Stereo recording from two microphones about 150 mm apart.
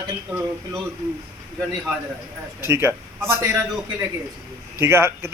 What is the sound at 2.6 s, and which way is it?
Speech, 15° right (ahead or behind).